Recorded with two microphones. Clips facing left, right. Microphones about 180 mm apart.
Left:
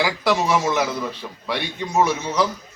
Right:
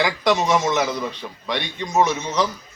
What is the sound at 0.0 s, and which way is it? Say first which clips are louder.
A man's voice: right 1 dB; 5° left (ahead or behind).